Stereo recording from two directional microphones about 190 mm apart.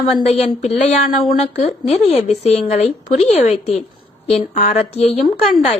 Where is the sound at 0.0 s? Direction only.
35° left (ahead or behind).